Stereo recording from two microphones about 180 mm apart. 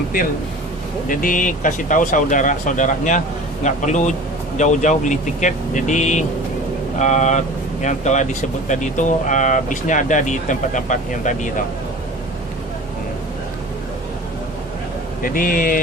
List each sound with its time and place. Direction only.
1.0 s a man's voice: 50° left (ahead or behind)
15.2 s speech: 50° left (ahead or behind)